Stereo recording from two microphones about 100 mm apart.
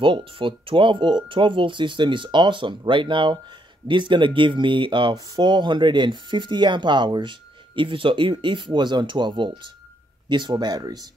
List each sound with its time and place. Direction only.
0.0 s speech: 60° right (ahead or behind)
5.1 s speech: 40° right (ahead or behind)